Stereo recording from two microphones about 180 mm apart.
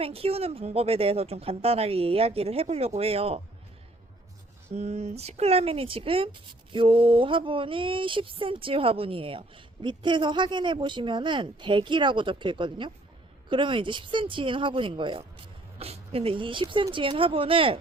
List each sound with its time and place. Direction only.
0.0 s speech: 35° right (ahead or behind)
4.7 s speech: 40° right (ahead or behind)